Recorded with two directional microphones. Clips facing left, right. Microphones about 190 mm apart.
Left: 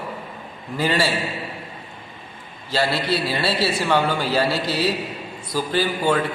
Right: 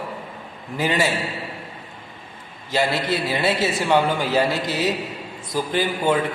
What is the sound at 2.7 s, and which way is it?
A man's voice, 20° right (ahead or behind).